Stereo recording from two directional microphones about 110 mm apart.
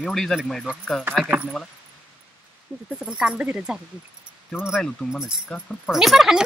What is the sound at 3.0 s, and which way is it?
Speech, 10° right (ahead or behind).